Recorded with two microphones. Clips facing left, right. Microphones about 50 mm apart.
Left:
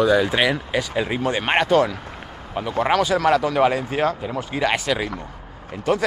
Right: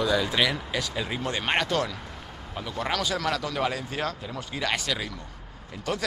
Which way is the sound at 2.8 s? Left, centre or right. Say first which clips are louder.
Left 9 dB; left.